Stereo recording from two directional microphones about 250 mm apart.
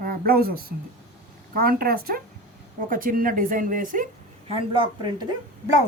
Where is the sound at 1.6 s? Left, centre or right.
Right.